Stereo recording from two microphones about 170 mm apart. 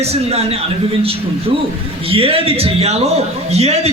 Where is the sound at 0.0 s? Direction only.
35° right (ahead or behind).